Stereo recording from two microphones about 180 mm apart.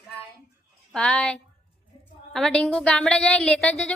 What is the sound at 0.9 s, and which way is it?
A woman's voice, 5° left (ahead or behind).